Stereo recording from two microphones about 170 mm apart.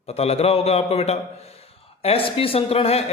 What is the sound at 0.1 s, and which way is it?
Speech, 35° left (ahead or behind).